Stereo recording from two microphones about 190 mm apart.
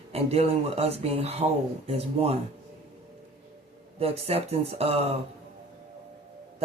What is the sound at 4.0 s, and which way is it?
Speech, 30° right (ahead or behind).